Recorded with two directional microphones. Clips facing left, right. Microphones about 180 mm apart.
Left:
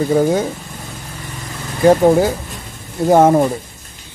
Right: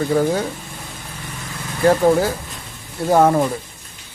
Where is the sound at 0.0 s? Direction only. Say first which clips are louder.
Left 3 dB; 20° left (ahead or behind).